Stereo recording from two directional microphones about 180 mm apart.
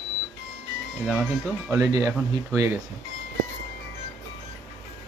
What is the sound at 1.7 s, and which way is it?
Speech, 20° right (ahead or behind).